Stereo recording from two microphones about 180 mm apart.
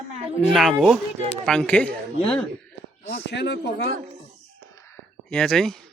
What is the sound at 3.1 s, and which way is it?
Speech, 70° left (ahead or behind).